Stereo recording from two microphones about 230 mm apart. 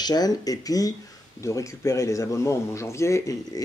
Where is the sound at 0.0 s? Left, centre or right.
Centre.